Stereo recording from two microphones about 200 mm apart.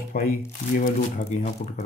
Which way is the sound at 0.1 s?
45° left (ahead or behind).